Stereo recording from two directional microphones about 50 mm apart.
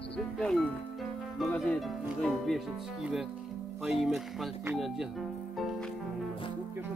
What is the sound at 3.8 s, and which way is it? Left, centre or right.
Speech, centre.